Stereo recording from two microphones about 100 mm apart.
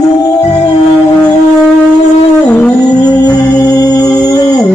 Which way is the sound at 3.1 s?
40° left (ahead or behind).